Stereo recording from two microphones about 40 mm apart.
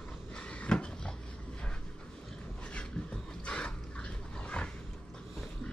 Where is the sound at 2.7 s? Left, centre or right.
Left.